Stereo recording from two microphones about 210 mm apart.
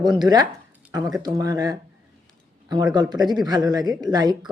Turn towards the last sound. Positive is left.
turn(degrees=-20)  # may be behind; listen again after turning